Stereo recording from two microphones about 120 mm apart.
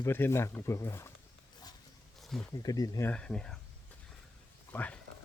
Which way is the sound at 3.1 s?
5° left (ahead or behind).